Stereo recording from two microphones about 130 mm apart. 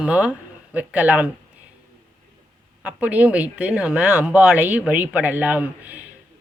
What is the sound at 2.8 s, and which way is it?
Speech, 10° right (ahead or behind).